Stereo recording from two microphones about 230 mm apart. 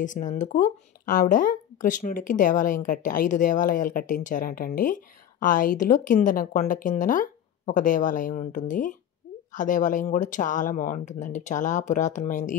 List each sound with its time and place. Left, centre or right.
0.0 s speech: left